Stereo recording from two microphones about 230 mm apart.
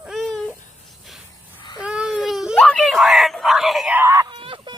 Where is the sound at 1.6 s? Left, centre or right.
Centre.